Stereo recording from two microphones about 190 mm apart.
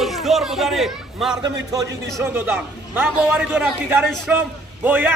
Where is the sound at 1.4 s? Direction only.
20° right (ahead or behind).